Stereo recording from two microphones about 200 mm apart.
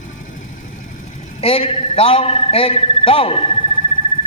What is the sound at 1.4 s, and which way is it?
A man's voice, 30° left (ahead or behind).